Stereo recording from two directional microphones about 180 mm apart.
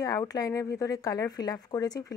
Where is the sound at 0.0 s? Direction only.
20° left (ahead or behind).